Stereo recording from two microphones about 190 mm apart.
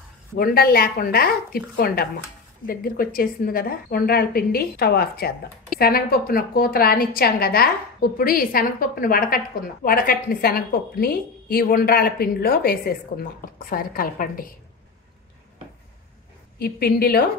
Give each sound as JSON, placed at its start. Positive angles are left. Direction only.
{"t": 0.4, "sound": "a woman's voice", "side_deg": 50}
{"t": 16.5, "sound": "a woman's voice", "side_deg": 55}